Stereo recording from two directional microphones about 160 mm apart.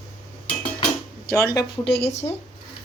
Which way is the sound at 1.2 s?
20° left (ahead or behind).